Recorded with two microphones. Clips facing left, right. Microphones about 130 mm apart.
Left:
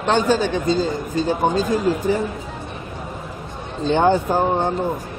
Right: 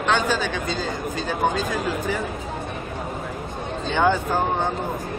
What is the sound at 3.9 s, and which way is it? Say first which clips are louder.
Speech: left 4 dB; 35° left (ahead or behind).